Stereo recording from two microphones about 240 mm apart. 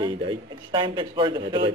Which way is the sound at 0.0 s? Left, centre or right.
Right.